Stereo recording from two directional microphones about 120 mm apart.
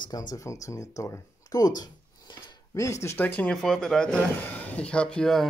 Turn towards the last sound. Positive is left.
turn(degrees=5)  # may be behind; listen again after turning